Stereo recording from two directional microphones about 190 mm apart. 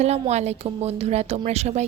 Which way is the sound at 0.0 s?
35° right (ahead or behind).